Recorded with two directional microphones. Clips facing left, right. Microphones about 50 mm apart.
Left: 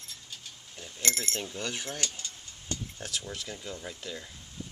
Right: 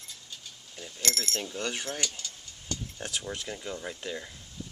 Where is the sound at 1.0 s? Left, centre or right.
Left.